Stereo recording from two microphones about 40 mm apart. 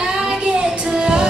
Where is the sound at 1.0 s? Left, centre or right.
Right.